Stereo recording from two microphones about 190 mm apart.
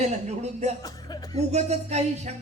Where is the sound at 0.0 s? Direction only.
35° right (ahead or behind).